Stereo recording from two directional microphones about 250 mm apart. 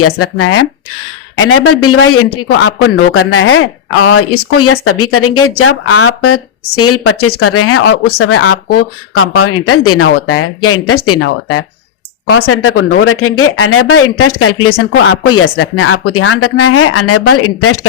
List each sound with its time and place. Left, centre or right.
0.0 s speech: left